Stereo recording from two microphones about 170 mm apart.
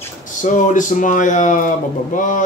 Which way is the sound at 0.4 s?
50° left (ahead or behind).